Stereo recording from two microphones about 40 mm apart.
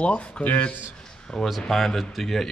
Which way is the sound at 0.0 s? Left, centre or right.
Left.